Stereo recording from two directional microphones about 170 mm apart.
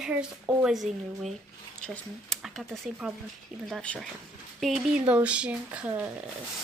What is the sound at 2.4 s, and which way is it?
A woman's voice, 5° right (ahead or behind).